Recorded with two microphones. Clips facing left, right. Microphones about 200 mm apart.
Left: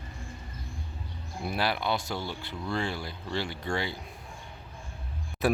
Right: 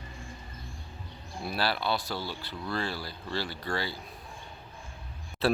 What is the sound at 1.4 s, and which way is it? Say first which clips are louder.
Speech: left 1 dB; 20° left (ahead or behind).